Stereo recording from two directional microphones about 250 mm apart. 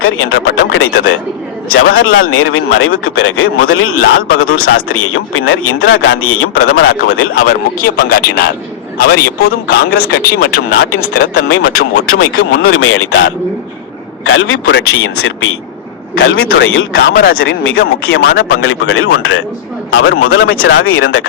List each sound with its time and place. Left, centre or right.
0.0 s speech: left
2.0 s a man's voice: left
7.4 s speech: left
11.4 s a man's voice: left
16.1 s speech: left